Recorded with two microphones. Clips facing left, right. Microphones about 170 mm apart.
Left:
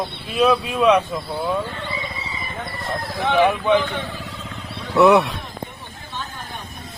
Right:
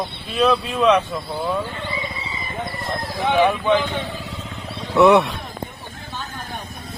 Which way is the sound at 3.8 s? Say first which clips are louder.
Right 1 dB; 20° right (ahead or behind).